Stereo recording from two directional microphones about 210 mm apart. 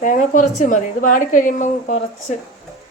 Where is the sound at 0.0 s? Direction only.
40° left (ahead or behind).